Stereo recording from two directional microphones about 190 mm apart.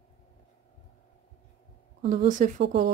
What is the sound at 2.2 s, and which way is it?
Speech, 45° right (ahead or behind).